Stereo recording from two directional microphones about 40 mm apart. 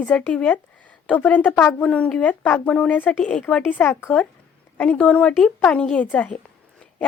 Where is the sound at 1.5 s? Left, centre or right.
Left.